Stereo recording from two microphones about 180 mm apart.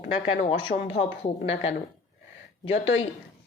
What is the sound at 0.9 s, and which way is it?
Speech, 35° left (ahead or behind).